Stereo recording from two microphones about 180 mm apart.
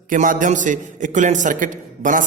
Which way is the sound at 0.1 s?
45° right (ahead or behind).